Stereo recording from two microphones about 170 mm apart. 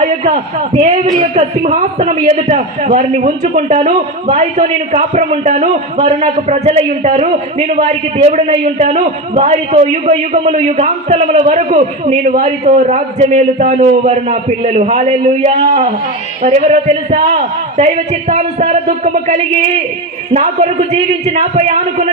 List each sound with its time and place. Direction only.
0.0 s a man's voice: 40° right (ahead or behind)
2.2 s a man's voice: 40° right (ahead or behind)